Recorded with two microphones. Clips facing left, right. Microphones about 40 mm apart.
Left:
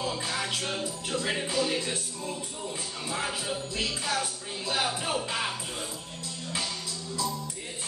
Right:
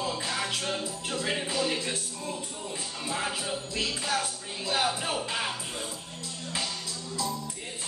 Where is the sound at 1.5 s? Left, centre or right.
Centre.